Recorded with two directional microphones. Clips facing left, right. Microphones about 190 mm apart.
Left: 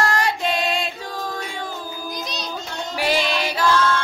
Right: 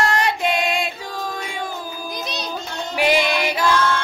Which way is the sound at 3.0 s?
15° right (ahead or behind).